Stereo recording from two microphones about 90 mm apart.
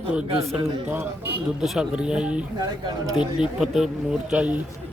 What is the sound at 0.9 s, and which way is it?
Speech, 25° right (ahead or behind).